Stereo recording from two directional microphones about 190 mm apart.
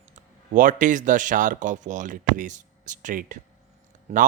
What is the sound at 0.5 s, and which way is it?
Speech, 45° right (ahead or behind).